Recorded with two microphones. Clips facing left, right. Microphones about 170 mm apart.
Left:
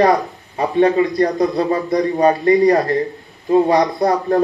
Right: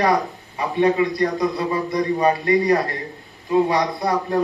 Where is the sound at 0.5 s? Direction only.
40° left (ahead or behind).